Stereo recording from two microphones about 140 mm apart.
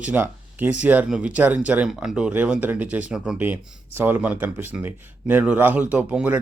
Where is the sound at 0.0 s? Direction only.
10° right (ahead or behind).